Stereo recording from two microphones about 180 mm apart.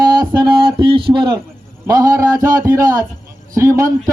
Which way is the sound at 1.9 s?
20° right (ahead or behind).